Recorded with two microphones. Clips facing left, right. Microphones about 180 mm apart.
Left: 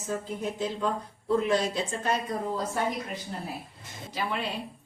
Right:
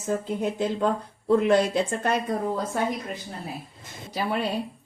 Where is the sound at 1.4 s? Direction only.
60° right (ahead or behind).